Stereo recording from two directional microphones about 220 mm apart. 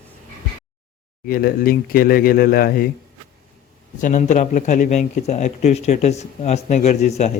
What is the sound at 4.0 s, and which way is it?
Speech, 35° left (ahead or behind).